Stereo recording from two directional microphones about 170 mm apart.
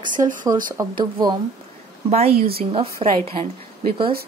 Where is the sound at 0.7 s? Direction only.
25° right (ahead or behind).